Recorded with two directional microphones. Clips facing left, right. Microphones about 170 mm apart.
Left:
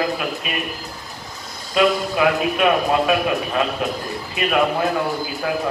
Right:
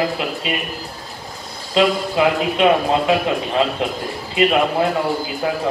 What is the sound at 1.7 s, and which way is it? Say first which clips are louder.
A man's voice: right 1 dB; 25° right (ahead or behind).